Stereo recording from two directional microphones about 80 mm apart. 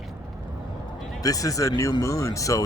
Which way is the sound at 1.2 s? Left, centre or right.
Left.